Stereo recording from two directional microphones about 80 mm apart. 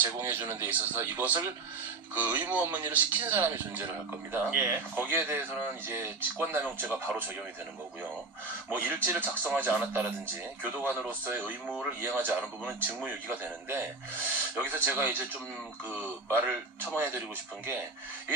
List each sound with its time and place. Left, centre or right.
0.3 s speech: right
8.6 s speech: right
16.3 s speech: right